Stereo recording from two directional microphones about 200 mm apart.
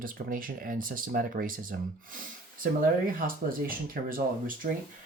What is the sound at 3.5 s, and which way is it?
Speech, 45° right (ahead or behind).